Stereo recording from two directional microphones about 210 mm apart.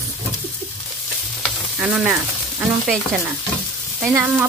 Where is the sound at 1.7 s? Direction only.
5° right (ahead or behind).